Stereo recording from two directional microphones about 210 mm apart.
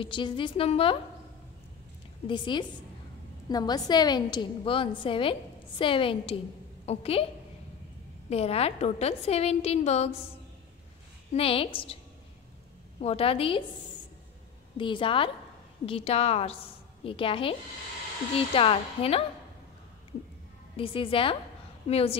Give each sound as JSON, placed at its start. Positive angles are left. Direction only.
{"t": 0.0, "sound": "a woman's voice", "side_deg": 25}
{"t": 2.2, "sound": "a woman's voice", "side_deg": 20}
{"t": 8.3, "sound": "a woman's voice", "side_deg": 30}
{"t": 11.3, "sound": "a woman's voice", "side_deg": 25}
{"t": 13.0, "sound": "a woman's voice", "side_deg": 25}
{"t": 14.8, "sound": "a woman's voice", "side_deg": 25}
{"t": 20.7, "sound": "a woman's voice", "side_deg": 25}